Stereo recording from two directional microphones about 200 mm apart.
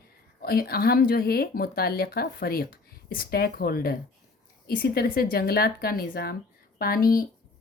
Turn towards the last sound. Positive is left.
turn(degrees=45)  # may be behind; listen again after turning